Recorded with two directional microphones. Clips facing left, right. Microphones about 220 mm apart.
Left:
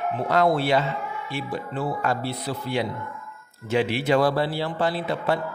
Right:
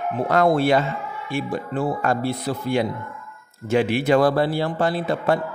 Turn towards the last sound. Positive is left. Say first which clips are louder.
# right 4 dB
turn(degrees=-50)  # may be behind; listen again after turning